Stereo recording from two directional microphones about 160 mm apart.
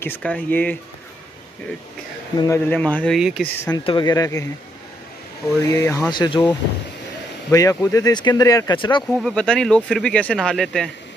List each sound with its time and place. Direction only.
0.0 s speech: 10° left (ahead or behind)
2.3 s speech: 20° left (ahead or behind)
3.2 s speech: 5° right (ahead or behind)
3.8 s speech: 30° left (ahead or behind)
5.7 s speech: 20° left (ahead or behind)
9.0 s speech: 5° left (ahead or behind)